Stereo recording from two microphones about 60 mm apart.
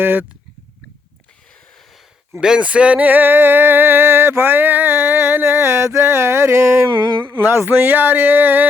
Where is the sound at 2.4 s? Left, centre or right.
Centre; by 6.9 s right.